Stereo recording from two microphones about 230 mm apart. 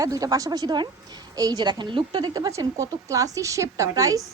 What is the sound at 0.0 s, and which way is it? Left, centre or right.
A woman's voice, centre.